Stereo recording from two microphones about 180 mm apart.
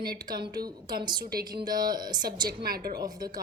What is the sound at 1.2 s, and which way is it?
Speech, 55° right (ahead or behind).